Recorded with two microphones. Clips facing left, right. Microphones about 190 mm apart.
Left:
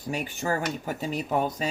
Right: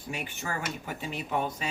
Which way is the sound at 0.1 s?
40° left (ahead or behind).